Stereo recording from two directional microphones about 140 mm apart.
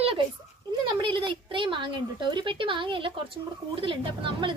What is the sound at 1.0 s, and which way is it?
A woman's voice, 35° right (ahead or behind).